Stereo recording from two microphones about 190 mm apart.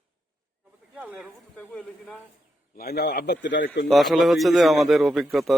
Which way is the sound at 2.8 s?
55° left (ahead or behind).